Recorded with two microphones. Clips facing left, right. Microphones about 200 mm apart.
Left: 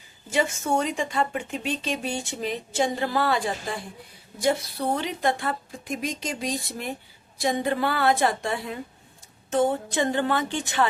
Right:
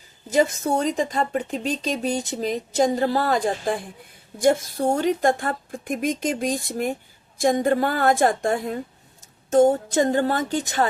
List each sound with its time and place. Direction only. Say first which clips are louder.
0.3 s a woman's voice: right 4 dB; 40° right (ahead or behind)